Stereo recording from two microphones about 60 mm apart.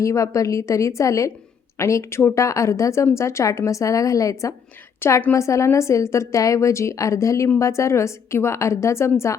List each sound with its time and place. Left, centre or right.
0.0 s a woman's voice: left
3.7 s a woman's voice: left
4.9 s a woman's voice: left